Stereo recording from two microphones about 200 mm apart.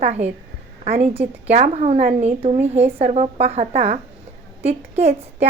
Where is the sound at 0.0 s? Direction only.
35° right (ahead or behind).